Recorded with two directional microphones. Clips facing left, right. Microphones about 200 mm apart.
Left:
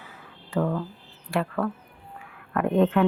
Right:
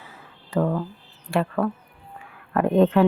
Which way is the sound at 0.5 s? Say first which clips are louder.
Right 3 dB; 35° right (ahead or behind).